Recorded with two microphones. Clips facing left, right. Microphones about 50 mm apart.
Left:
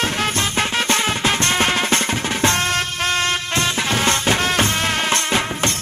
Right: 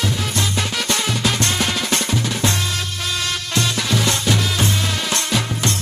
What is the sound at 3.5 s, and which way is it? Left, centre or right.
Music, left.